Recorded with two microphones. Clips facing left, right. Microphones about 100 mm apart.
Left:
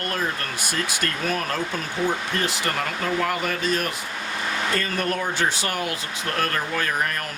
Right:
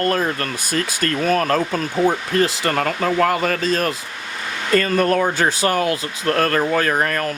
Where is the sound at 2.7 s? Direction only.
55° right (ahead or behind).